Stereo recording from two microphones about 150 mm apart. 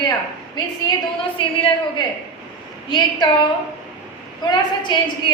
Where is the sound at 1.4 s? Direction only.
35° left (ahead or behind).